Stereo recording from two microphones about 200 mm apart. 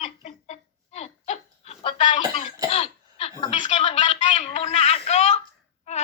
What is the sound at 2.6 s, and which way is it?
Cough, 30° left (ahead or behind).